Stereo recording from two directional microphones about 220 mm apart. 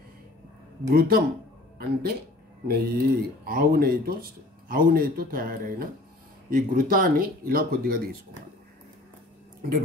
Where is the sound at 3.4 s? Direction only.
45° right (ahead or behind).